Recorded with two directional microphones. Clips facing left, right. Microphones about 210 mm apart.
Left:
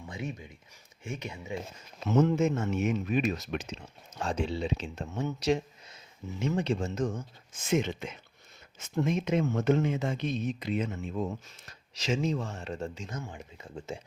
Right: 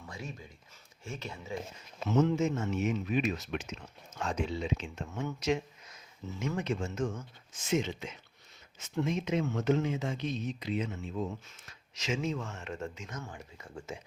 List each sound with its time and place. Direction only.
0.0 s a sound: 15° left (ahead or behind)
1.0 s speech: 15° left (ahead or behind)
2.1 s speech: 50° left (ahead or behind); by 5.2 s 35° left (ahead or behind)
5.4 s a sound: 35° left (ahead or behind)
6.2 s speech: 15° left (ahead or behind)
6.6 s speech: 35° left (ahead or behind)
7.7 s speech: 55° left (ahead or behind)
11.9 s speech: 35° left (ahead or behind)
13.2 s speech: 20° left (ahead or behind)